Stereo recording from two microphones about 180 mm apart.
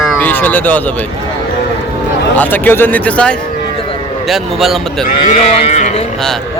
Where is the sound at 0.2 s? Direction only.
10° left (ahead or behind).